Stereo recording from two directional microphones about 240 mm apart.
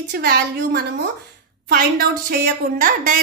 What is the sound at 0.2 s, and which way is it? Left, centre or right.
A woman's voice, right.